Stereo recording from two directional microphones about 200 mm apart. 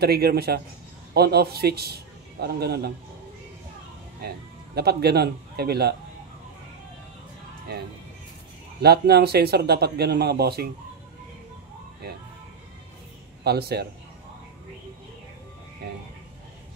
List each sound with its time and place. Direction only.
0.0 s speech: 50° right (ahead or behind)
4.7 s speech: 55° right (ahead or behind)
8.8 s speech: 55° right (ahead or behind)
13.4 s a man's voice: 55° right (ahead or behind)